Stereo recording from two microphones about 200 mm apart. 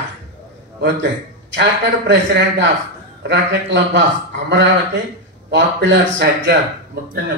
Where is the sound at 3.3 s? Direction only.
60° right (ahead or behind).